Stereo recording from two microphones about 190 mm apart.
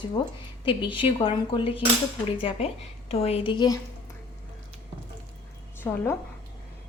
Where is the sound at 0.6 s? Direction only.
25° left (ahead or behind).